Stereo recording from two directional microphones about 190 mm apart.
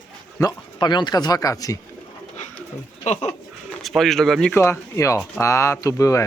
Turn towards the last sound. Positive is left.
turn(degrees=15)  # may be behind; listen again after turning